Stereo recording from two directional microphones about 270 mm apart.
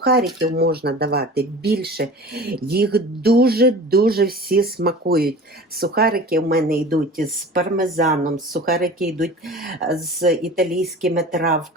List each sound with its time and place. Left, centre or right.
0.0 s speech: right
9.2 s speech: centre
9.8 s speech: right